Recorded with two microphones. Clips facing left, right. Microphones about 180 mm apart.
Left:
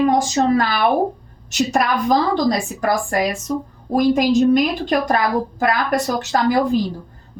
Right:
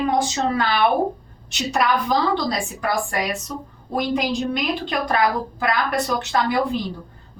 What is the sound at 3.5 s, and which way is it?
A woman's voice, 40° left (ahead or behind).